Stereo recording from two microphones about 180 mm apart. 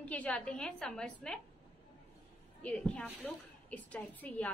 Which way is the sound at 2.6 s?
5° left (ahead or behind).